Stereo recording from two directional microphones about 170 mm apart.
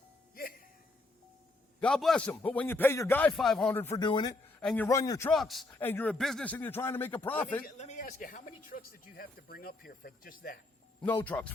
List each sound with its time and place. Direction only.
0.3 s music: 60° left (ahead or behind)
1.8 s a man's voice: 5° left (ahead or behind)
3.9 s speech: 25° left (ahead or behind)
4.6 s a man's voice: 5° left (ahead or behind)
4.9 s speech: 20° left (ahead or behind)
5.3 s a man's voice: centre (ahead or behind)
5.8 s speech: 10° left (ahead or behind)
7.6 s speech: 45° left (ahead or behind)
11.0 s speech: 10° left (ahead or behind)